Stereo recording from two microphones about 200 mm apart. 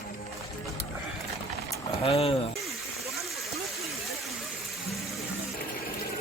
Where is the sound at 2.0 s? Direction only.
30° left (ahead or behind).